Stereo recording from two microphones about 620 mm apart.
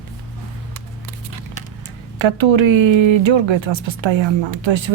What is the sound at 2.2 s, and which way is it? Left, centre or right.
Speech, right.